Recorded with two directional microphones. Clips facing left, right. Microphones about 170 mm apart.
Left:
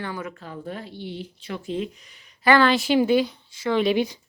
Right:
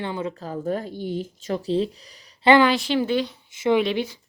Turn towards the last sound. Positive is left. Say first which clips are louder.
# left 3 dB
turn(degrees=15)  # may be behind; listen again after turning